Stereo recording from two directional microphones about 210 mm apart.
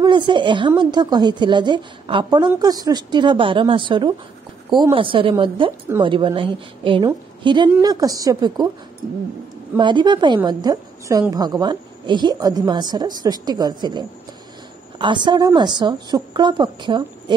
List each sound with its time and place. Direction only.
0.0 s a woman's voice: 20° right (ahead or behind)
9.8 s a woman's voice: 20° right (ahead or behind)